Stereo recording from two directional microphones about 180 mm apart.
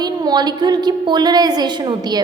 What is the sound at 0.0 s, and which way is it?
A woman's voice, 25° right (ahead or behind).